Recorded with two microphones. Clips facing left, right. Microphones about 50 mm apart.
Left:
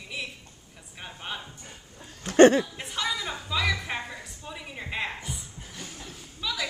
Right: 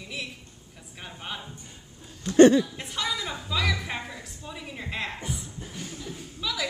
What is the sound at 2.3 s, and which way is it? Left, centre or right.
Speech, left.